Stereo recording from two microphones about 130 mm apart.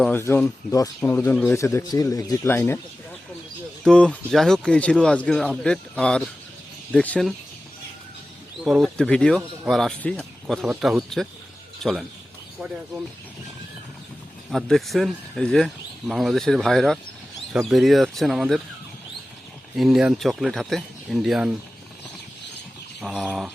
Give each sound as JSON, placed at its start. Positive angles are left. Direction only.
{"t": 0.1, "sound": "speech", "side_deg": 15}
{"t": 3.8, "sound": "speech", "side_deg": 10}
{"t": 8.6, "sound": "speech", "side_deg": 0}
{"t": 14.5, "sound": "speech", "side_deg": 0}
{"t": 19.7, "sound": "speech", "side_deg": -5}
{"t": 23.0, "sound": "speech", "side_deg": 0}